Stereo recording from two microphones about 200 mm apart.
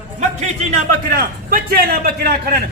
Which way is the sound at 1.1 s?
50° right (ahead or behind).